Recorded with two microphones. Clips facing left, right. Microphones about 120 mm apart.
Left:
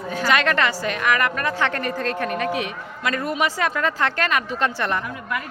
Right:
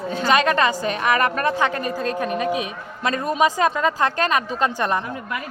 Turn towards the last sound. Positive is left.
turn(degrees=-20)  # may be behind; listen again after turning